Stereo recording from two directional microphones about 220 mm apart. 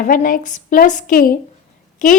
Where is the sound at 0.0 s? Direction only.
40° left (ahead or behind).